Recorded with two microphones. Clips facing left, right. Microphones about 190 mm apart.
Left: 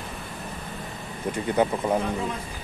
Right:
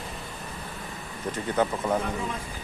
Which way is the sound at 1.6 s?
15° left (ahead or behind).